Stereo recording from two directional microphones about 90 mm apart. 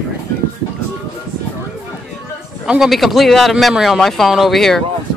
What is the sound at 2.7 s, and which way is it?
Speech, 5° right (ahead or behind).